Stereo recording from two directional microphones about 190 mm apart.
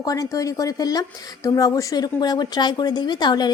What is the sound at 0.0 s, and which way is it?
Speech, 20° left (ahead or behind).